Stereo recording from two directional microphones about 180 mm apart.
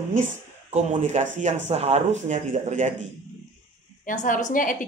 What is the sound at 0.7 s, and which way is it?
A man's voice, 40° right (ahead or behind).